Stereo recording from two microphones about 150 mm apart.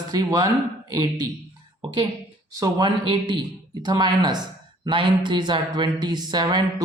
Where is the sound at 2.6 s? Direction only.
30° right (ahead or behind).